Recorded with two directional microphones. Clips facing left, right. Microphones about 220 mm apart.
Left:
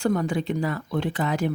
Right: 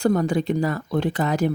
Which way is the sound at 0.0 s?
40° right (ahead or behind).